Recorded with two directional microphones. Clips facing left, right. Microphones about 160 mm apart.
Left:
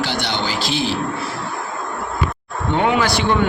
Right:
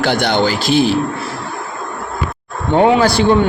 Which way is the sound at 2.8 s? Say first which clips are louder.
Right 7 dB; 30° right (ahead or behind).